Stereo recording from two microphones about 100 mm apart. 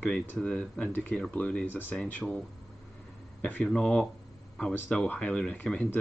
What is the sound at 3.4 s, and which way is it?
Speech, 10° left (ahead or behind).